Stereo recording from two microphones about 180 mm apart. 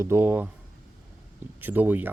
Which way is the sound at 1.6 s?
10° right (ahead or behind).